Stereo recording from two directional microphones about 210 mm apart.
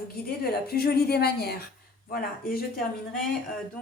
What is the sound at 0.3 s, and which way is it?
A woman's voice, 45° left (ahead or behind).